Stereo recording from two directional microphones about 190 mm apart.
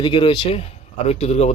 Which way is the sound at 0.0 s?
25° left (ahead or behind).